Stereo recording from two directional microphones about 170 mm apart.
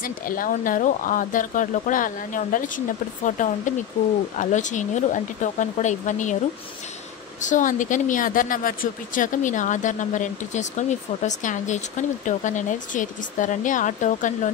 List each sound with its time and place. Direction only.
0.0 s a woman's voice: 55° left (ahead or behind)
7.4 s a woman's voice: 50° left (ahead or behind)